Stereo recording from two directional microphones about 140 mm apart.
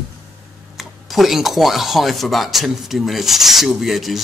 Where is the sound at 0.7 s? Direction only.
Centre (ahead or behind).